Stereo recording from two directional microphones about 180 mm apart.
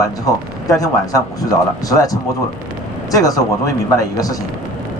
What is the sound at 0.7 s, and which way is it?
Speech, 20° left (ahead or behind).